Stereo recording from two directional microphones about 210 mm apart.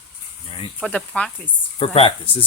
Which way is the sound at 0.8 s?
5° left (ahead or behind).